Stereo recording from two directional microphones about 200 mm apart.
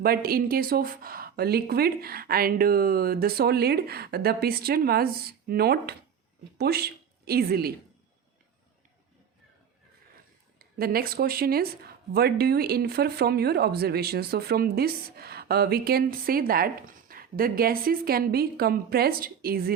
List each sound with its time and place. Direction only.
0.0 s a woman's voice: 50° right (ahead or behind)
10.6 s speech: 50° right (ahead or behind)